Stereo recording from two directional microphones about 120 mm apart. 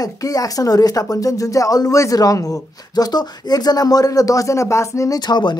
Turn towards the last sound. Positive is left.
turn(degrees=35)  # may be behind; listen again after turning